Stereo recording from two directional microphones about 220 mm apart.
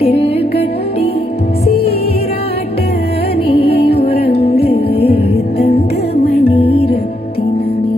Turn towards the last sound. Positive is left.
turn(degrees=45)  # may be behind; listen again after turning